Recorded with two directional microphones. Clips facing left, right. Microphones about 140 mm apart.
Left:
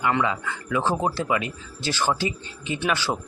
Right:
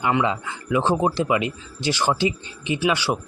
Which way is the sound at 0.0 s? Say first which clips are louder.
Right 2 dB; 20° right (ahead or behind).